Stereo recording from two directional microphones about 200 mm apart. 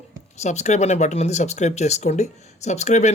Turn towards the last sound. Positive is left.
turn(degrees=35)  # may be behind; listen again after turning